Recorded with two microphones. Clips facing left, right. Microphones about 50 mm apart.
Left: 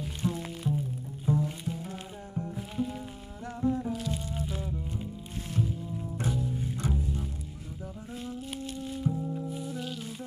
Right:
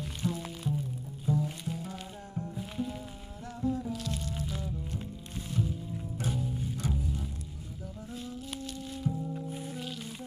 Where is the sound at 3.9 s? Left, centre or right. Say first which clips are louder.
Left 3 dB; centre.